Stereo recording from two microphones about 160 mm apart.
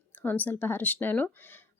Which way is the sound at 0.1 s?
10° left (ahead or behind).